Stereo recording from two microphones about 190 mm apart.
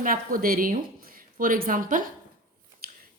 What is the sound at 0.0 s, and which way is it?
A woman's voice, 50° right (ahead or behind).